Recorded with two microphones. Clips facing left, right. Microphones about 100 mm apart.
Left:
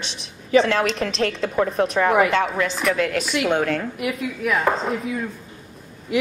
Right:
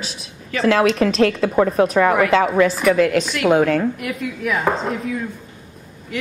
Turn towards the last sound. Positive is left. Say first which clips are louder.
# right 1 dB
turn(degrees=0)  # may be behind; listen again after turning